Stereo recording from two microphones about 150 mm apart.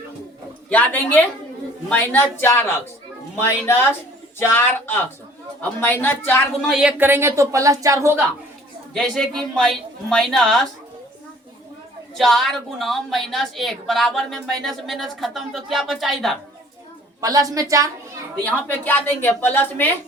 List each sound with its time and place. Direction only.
0.7 s a woman's voice: 10° left (ahead or behind)
6.7 s a woman's voice: 5° right (ahead or behind)
8.9 s a woman's voice: 5° left (ahead or behind)
12.1 s a woman's voice: centre (ahead or behind)
17.2 s a woman's voice: 20° right (ahead or behind)
18.5 s a woman's voice: 10° left (ahead or behind)